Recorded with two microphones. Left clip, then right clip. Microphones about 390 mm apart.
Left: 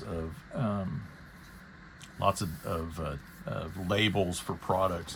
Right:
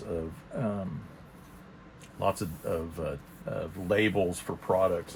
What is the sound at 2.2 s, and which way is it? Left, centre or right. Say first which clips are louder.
Speech: even; centre.